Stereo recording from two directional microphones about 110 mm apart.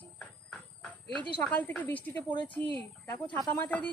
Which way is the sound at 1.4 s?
15° left (ahead or behind).